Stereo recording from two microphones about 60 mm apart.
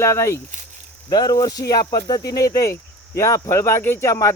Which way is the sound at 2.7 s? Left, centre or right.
Left.